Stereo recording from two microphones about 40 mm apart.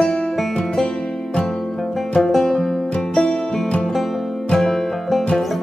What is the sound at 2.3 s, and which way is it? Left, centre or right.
Music, centre.